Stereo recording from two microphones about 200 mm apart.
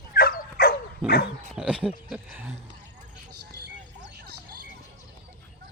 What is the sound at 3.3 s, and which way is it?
Vehicle, 55° right (ahead or behind).